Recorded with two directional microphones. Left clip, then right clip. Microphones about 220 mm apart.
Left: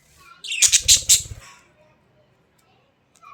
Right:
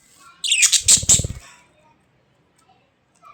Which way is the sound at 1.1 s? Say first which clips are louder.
Even; 20° right (ahead or behind).